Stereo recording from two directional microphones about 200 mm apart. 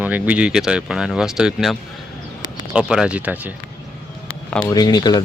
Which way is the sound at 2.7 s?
5° right (ahead or behind).